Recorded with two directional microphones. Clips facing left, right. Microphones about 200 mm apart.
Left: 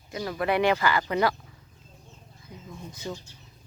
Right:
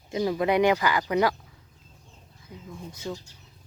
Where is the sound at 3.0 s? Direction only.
5° left (ahead or behind).